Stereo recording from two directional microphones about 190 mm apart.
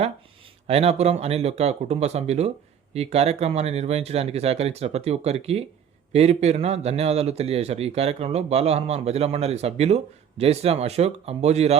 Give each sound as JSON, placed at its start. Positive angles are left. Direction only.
{"t": 0.7, "sound": "speech", "side_deg": -30}